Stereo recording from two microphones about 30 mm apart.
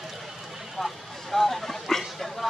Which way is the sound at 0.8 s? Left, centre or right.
Centre.